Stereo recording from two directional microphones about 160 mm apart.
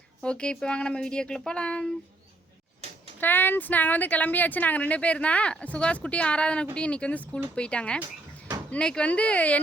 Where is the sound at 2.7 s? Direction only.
40° right (ahead or behind).